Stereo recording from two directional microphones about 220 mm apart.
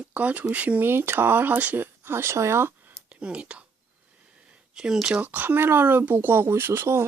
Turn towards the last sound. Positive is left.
turn(degrees=-10)  # may be behind; listen again after turning